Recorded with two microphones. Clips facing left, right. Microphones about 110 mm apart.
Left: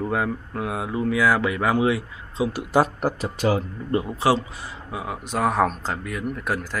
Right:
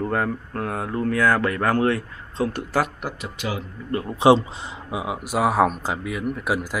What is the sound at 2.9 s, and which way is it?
Speech, 40° left (ahead or behind).